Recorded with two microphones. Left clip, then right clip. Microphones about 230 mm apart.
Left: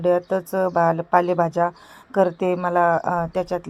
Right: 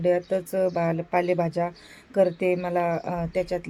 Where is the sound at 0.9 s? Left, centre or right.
Centre.